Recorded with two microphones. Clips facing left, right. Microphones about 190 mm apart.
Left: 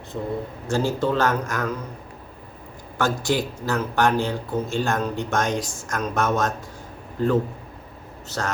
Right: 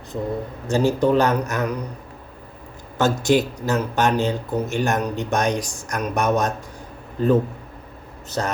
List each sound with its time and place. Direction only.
0.7 s a man's voice: 15° right (ahead or behind)
3.0 s a man's voice: 20° right (ahead or behind)